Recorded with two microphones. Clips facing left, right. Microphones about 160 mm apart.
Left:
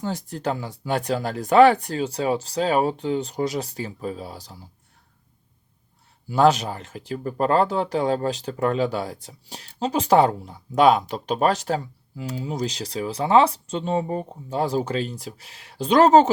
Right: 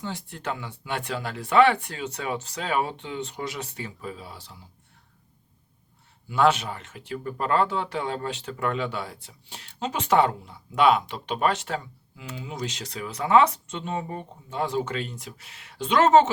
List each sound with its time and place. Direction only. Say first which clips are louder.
0.0 s speech: left 6 dB; 40° left (ahead or behind)
6.2 s speech: left 4 dB; 35° left (ahead or behind)